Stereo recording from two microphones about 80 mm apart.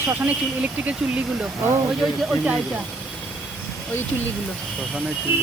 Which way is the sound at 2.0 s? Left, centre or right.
Centre.